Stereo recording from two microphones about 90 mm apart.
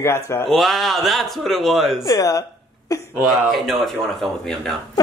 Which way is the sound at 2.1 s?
40° left (ahead or behind).